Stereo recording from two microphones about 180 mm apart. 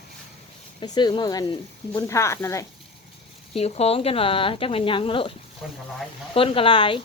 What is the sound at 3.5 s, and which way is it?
Speech, 35° left (ahead or behind).